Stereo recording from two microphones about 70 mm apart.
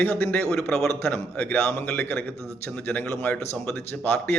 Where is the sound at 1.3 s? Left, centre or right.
Left.